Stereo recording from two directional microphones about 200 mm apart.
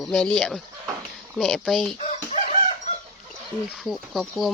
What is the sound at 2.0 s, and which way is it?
Chicken, 35° left (ahead or behind).